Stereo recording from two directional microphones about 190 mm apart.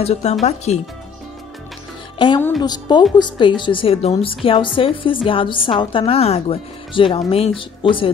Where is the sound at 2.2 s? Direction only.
25° left (ahead or behind).